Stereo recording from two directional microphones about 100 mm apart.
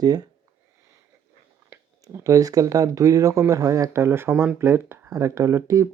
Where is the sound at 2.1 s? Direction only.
35° right (ahead or behind).